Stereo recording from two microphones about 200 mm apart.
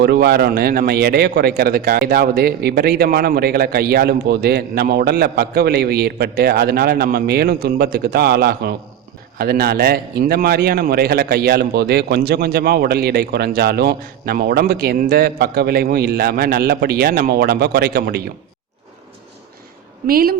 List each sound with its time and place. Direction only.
0.0 s a man's voice: 55° right (ahead or behind)
20.1 s a man's voice: 50° right (ahead or behind)